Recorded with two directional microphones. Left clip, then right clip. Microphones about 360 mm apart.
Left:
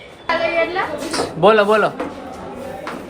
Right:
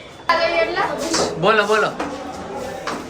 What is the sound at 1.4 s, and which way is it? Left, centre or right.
Speech, centre.